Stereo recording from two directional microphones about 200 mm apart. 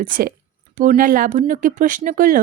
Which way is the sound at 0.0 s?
45° right (ahead or behind).